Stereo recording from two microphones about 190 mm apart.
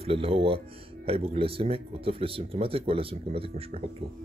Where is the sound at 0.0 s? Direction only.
30° right (ahead or behind).